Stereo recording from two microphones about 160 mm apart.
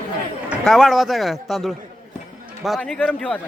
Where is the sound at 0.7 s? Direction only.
5° right (ahead or behind).